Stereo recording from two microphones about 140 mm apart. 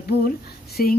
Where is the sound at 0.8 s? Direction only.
90° left.